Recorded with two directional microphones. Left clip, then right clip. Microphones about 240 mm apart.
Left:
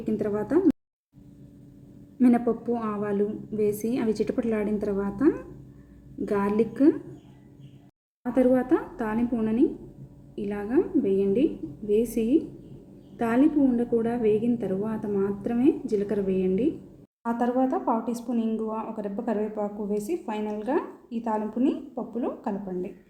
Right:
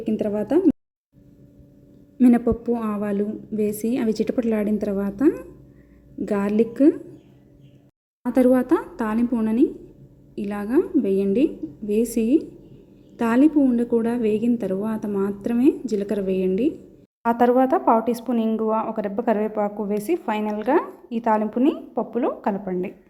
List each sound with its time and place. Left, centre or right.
0.0 s speech: right
2.1 s speech: right
8.2 s a woman's voice: right